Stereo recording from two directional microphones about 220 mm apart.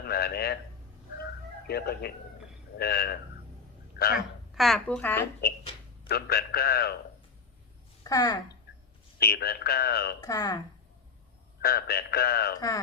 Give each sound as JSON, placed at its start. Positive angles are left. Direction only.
{"t": 0.0, "sound": "a man's voice", "side_deg": 45}
{"t": 1.2, "sound": "music", "side_deg": 45}
{"t": 2.7, "sound": "a man's voice", "side_deg": 45}
{"t": 4.5, "sound": "speech", "side_deg": 0}
{"t": 5.4, "sound": "a man's voice", "side_deg": 45}
{"t": 8.0, "sound": "speech", "side_deg": 15}
{"t": 9.1, "sound": "a man's voice", "side_deg": 45}
{"t": 10.2, "sound": "speech", "side_deg": 15}
{"t": 11.6, "sound": "a man's voice", "side_deg": 45}
{"t": 12.5, "sound": "speech", "side_deg": 15}